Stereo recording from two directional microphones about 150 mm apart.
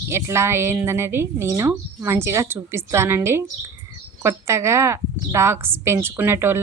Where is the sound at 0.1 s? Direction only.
15° right (ahead or behind).